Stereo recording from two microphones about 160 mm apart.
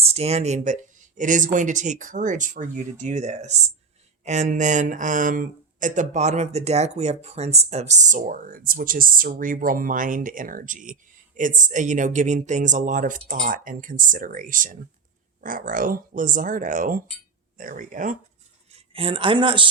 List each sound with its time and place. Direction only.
0.0 s speech: 40° right (ahead or behind)
18.9 s speech: 35° right (ahead or behind)